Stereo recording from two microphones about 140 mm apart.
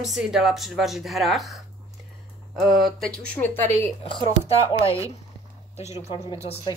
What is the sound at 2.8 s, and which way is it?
Speech, 5° left (ahead or behind).